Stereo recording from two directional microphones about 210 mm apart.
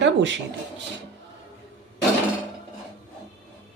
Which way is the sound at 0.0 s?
60° right (ahead or behind).